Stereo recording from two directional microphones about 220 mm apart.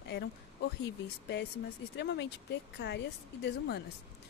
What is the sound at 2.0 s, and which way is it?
Speech, 50° left (ahead or behind).